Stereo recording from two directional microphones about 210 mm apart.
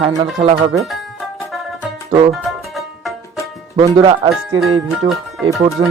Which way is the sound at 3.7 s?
20° right (ahead or behind).